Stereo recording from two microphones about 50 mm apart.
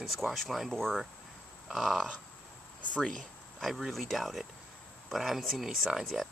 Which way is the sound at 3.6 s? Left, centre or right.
Centre.